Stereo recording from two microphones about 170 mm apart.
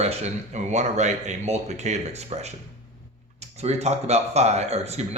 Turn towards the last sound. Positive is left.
turn(degrees=-40)  # may be behind; listen again after turning